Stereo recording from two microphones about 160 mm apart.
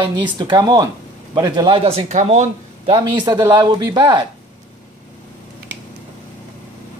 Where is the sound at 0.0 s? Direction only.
30° right (ahead or behind).